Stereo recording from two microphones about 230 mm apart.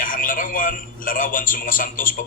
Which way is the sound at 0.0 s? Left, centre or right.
Left.